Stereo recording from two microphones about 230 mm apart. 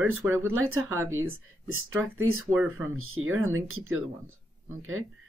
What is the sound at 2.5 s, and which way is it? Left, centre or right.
Speech, centre.